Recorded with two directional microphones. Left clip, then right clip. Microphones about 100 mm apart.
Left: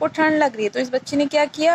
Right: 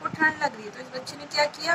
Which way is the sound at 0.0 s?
40° left (ahead or behind).